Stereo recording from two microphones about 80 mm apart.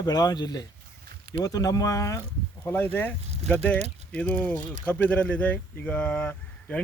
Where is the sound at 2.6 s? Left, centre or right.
Left.